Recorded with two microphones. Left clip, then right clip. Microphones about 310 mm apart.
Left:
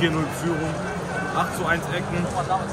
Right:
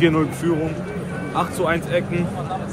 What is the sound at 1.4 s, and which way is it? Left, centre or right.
Speech, right.